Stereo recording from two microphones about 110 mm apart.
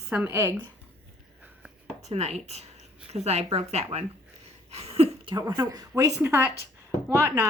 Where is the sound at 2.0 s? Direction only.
85° right.